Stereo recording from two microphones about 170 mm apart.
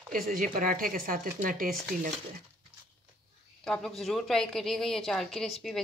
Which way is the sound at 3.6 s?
5° left (ahead or behind).